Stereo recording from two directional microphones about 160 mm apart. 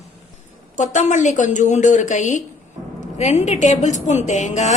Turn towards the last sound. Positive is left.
turn(degrees=50)  # may be behind; listen again after turning